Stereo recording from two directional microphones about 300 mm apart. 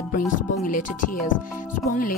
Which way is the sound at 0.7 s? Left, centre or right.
Left.